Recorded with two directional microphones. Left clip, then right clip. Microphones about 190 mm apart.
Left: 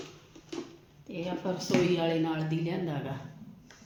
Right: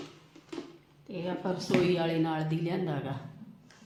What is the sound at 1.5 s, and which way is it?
A woman's voice, 30° right (ahead or behind).